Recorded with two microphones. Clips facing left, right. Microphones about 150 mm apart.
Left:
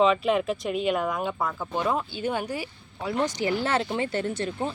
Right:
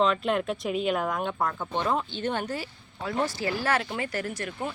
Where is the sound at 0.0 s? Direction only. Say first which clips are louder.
Left 3 dB; centre (ahead or behind).